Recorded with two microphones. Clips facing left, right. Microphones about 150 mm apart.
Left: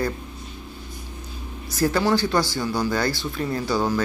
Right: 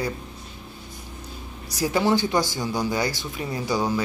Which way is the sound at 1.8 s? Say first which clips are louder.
Left 1 dB; 15° right (ahead or behind).